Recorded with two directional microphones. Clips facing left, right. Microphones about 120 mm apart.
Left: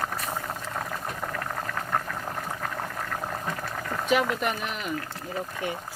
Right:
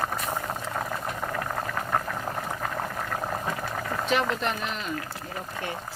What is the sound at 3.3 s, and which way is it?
Boiling, 10° right (ahead or behind).